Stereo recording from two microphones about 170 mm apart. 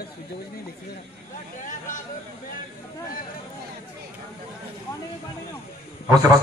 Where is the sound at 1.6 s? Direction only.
50° left (ahead or behind).